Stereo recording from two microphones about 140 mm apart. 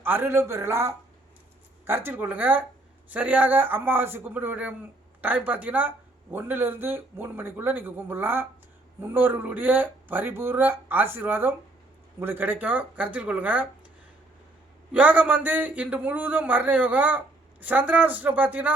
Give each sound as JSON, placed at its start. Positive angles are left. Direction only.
{"t": 0.0, "sound": "speech", "side_deg": -15}
{"t": 14.9, "sound": "speech", "side_deg": -10}